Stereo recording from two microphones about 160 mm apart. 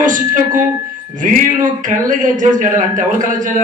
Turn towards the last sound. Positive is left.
turn(degrees=-55)  # may be behind; listen again after turning